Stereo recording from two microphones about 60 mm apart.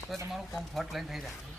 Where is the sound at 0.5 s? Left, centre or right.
Centre.